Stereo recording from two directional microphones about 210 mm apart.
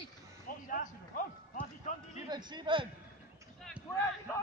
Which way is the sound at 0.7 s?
40° left (ahead or behind).